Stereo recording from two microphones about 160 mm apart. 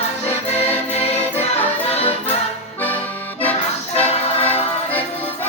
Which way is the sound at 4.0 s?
40° left (ahead or behind).